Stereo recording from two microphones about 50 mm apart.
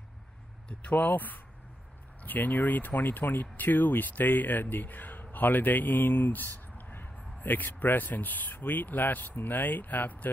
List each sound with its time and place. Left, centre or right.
0.7 s speech: left